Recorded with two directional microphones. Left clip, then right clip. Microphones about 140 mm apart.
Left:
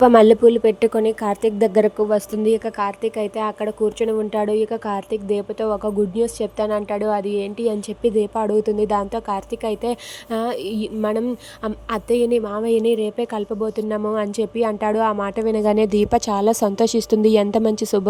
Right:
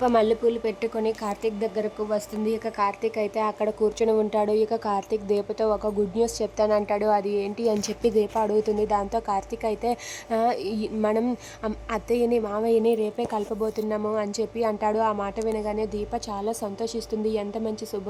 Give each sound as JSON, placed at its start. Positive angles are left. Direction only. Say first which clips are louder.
{"t": 0.0, "sound": "speech", "louder": "left 10 dB", "side_deg": 50}
{"t": 2.0, "sound": "a woman's voice", "louder": "left 8 dB", "side_deg": 40}
{"t": 13.9, "sound": "a woman's voice", "louder": "left 5 dB", "side_deg": 35}
{"t": 15.4, "sound": "speech", "louder": "left 12 dB", "side_deg": 65}